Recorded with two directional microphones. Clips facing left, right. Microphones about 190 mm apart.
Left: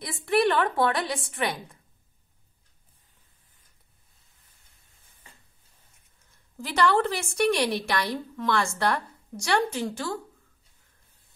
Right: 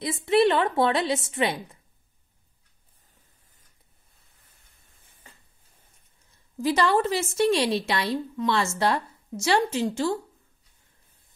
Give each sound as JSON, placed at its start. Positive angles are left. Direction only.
{"t": 0.0, "sound": "a woman's voice", "side_deg": -20}
{"t": 6.6, "sound": "a woman's voice", "side_deg": -20}